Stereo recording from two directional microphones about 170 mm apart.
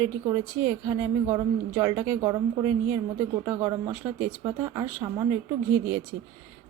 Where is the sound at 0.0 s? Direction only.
15° right (ahead or behind).